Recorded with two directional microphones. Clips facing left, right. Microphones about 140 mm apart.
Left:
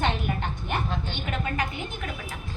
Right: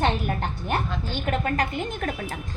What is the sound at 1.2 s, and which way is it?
Speech, 45° right (ahead or behind).